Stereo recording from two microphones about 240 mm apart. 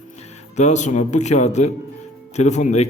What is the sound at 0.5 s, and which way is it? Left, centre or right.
A man's voice, left.